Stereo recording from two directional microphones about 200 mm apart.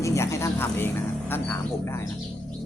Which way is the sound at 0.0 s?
15° left (ahead or behind).